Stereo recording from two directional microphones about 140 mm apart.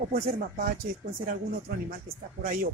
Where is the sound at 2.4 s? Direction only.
90° right.